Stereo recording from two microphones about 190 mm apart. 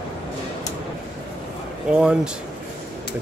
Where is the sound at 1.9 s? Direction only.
5° right (ahead or behind).